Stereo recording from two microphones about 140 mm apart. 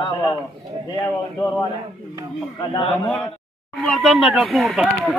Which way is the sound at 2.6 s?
35° left (ahead or behind).